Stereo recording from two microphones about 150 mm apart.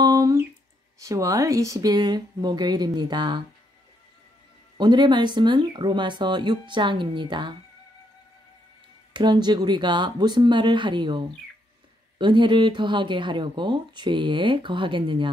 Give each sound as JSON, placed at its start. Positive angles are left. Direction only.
{"t": 0.0, "sound": "a sound", "side_deg": -25}
{"t": 0.9, "sound": "speech", "side_deg": -20}
{"t": 4.7, "sound": "speech", "side_deg": -30}
{"t": 9.1, "sound": "speech", "side_deg": -30}